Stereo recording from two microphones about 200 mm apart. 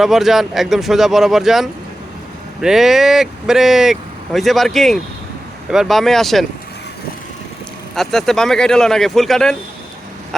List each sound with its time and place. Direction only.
0.0 s speech: centre (ahead or behind)
7.9 s speech: centre (ahead or behind)